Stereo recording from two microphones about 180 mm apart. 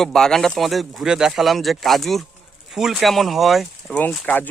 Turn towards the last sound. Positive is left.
turn(degrees=10)  # may be behind; listen again after turning